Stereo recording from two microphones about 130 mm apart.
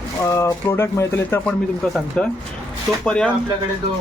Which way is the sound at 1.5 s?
5° left (ahead or behind).